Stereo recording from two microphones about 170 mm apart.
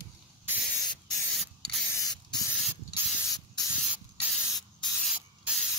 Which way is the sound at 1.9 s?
20° left (ahead or behind).